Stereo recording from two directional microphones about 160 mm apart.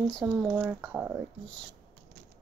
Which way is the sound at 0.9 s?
15° right (ahead or behind).